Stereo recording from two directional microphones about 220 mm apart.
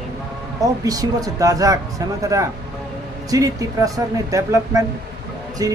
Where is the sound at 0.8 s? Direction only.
15° right (ahead or behind).